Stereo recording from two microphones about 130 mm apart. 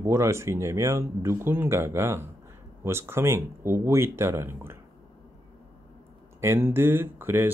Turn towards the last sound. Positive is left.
turn(degrees=-15)  # may be behind; listen again after turning